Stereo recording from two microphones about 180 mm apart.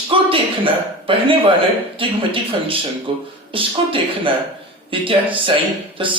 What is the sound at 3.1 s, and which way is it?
Speech, 30° right (ahead or behind).